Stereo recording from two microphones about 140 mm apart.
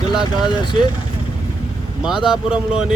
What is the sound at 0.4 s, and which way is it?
Speech, 35° left (ahead or behind).